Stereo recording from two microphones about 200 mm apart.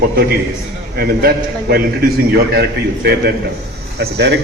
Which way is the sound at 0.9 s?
50° right (ahead or behind).